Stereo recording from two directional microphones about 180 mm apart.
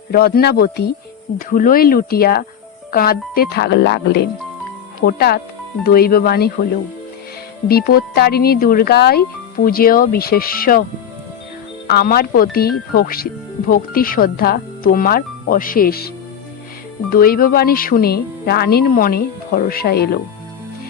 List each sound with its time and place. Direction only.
0.1 s speech: 60° left (ahead or behind)
1.4 s speech: 50° left (ahead or behind)
7.7 s speech: 55° left (ahead or behind)
11.9 s speech: 60° left (ahead or behind)